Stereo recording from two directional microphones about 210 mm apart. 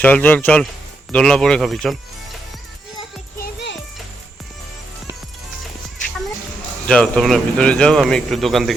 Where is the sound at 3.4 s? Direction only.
55° left (ahead or behind).